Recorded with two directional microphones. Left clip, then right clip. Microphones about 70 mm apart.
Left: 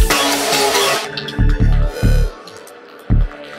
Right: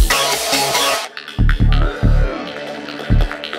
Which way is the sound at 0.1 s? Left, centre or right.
Centre.